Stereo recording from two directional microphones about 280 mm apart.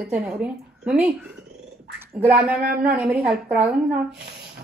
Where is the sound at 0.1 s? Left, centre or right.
Centre.